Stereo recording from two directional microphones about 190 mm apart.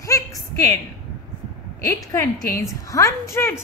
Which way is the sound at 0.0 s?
20° left (ahead or behind).